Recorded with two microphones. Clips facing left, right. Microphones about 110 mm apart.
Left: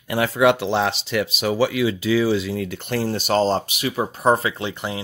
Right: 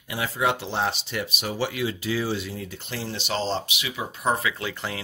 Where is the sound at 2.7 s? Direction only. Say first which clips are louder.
Left 9 dB; 55° left (ahead or behind); by 4.5 s 35° left (ahead or behind).